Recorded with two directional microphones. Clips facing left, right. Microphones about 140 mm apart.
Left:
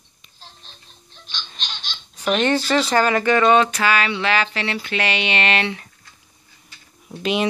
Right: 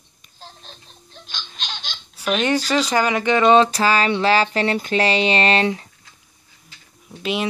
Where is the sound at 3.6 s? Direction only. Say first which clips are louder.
Right 2 dB; 35° right (ahead or behind).